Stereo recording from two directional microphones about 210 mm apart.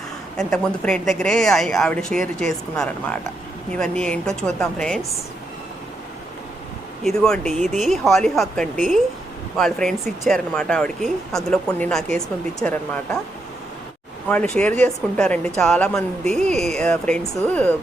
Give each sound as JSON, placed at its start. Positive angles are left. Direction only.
{"t": 0.3, "sound": "speech", "side_deg": 5}
{"t": 2.2, "sound": "speech", "side_deg": -40}
{"t": 2.7, "sound": "speech", "side_deg": 5}
{"t": 7.0, "sound": "speech", "side_deg": 0}
{"t": 14.3, "sound": "speech", "side_deg": 5}